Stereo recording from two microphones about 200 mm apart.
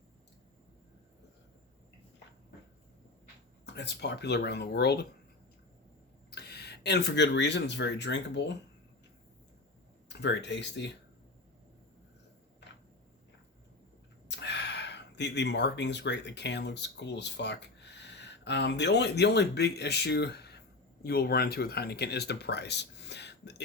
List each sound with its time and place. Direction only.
3.7 s speech: 55° left (ahead or behind)
6.3 s speech: 55° left (ahead or behind)
10.1 s speech: 60° left (ahead or behind)
14.3 s speech: 60° left (ahead or behind)